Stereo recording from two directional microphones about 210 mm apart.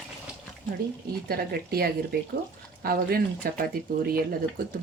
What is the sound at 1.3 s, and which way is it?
Speech, 45° right (ahead or behind).